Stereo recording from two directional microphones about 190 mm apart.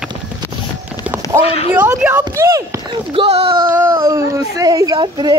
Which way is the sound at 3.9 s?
20° right (ahead or behind).